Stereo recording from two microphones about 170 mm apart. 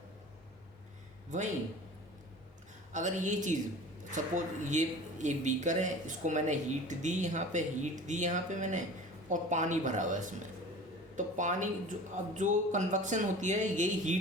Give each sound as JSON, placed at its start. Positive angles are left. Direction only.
{"t": 2.9, "sound": "speech", "side_deg": -45}